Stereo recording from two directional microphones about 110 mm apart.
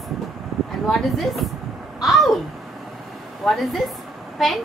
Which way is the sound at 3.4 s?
Centre (ahead or behind).